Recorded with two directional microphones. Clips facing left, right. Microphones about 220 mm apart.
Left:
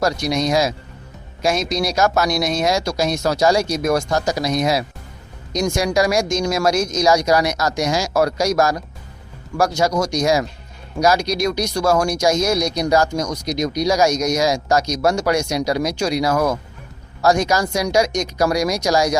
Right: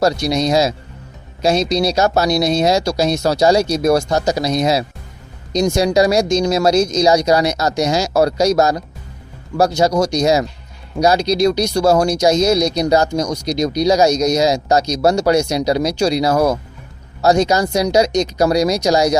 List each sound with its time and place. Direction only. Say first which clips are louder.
0.0 s speech: right 3 dB; 35° right (ahead or behind)
17.2 s speech: right 3 dB; 20° right (ahead or behind)